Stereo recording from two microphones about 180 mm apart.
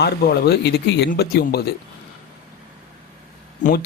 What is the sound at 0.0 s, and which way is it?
Speech, 65° left (ahead or behind).